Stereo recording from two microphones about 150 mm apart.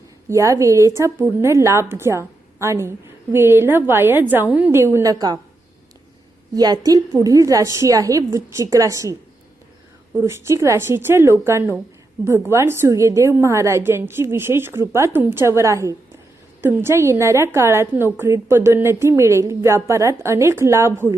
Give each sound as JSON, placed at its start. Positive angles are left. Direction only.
{"t": 0.3, "sound": "a woman's voice", "side_deg": -20}
{"t": 6.5, "sound": "a woman's voice", "side_deg": -25}
{"t": 10.2, "sound": "a woman's voice", "side_deg": -20}